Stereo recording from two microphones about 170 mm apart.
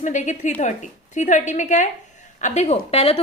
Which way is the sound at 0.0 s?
45° left (ahead or behind).